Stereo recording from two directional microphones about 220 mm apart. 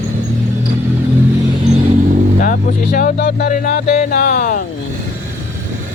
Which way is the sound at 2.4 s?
40° left (ahead or behind).